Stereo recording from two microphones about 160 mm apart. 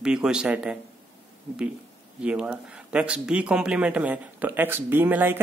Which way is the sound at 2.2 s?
5° right (ahead or behind).